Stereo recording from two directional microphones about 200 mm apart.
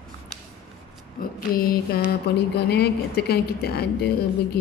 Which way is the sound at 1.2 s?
45° left (ahead or behind).